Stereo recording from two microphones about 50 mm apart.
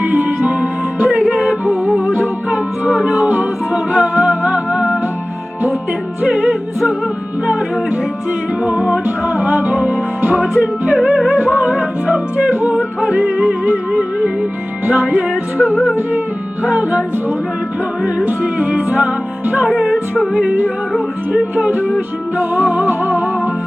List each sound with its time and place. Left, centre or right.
0.0 s music: right
6.2 s music: right
8.6 s music: right
18.3 s music: right
22.7 s music: right